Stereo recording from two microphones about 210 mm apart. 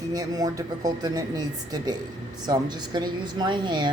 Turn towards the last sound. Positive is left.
turn(degrees=-20)  # may be behind; listen again after turning